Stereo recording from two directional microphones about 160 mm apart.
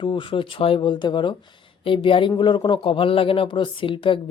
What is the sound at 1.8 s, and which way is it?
Speech, 35° left (ahead or behind).